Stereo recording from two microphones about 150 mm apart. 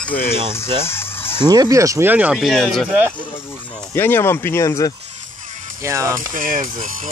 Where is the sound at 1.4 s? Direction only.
25° right (ahead or behind).